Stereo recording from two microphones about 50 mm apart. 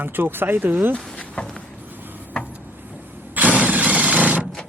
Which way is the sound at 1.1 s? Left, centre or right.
Left.